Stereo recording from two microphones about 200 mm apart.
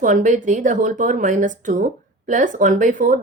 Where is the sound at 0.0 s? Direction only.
40° right (ahead or behind).